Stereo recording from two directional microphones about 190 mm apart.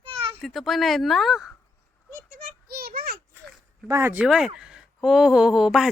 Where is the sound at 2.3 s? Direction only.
50° right (ahead or behind).